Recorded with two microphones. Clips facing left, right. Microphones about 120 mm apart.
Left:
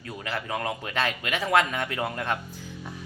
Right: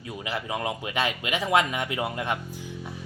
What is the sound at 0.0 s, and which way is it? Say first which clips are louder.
Speech: right 1 dB; 15° right (ahead or behind).